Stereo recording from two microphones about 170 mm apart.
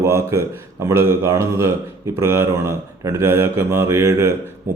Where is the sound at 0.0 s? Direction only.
15° right (ahead or behind).